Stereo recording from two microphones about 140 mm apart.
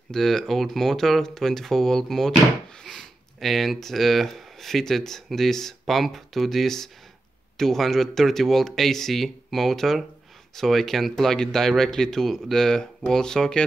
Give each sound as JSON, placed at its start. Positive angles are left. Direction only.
{"t": 0.1, "sound": "speech", "side_deg": 5}